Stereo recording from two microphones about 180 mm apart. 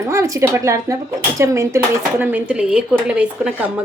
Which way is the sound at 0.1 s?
15° right (ahead or behind).